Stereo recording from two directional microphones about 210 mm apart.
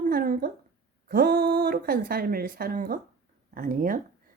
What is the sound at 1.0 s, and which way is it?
Speech, 45° right (ahead or behind).